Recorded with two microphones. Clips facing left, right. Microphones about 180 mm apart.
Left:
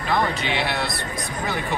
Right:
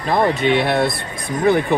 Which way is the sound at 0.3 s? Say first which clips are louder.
Right 9 dB; 55° right (ahead or behind).